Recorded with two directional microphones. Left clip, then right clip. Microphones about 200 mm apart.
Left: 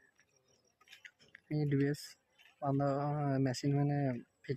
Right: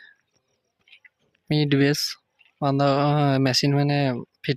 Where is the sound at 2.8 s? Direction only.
40° right (ahead or behind).